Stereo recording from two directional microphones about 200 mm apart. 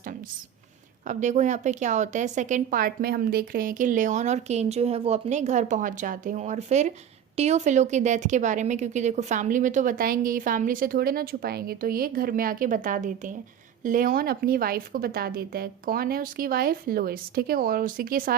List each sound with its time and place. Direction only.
1.0 s a woman's voice: 35° right (ahead or behind)